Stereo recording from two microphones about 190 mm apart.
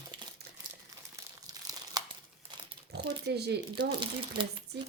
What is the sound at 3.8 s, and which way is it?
Speech, 25° right (ahead or behind).